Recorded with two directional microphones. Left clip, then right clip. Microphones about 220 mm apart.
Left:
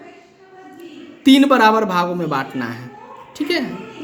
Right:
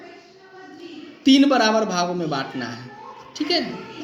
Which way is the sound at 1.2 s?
40° left (ahead or behind).